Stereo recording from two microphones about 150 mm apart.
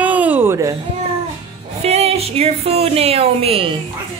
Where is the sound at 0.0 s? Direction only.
10° right (ahead or behind).